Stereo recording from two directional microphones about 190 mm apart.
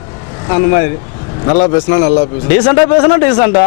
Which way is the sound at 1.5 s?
35° left (ahead or behind).